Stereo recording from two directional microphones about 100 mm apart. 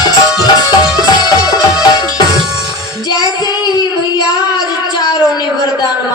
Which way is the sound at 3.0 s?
45° left (ahead or behind).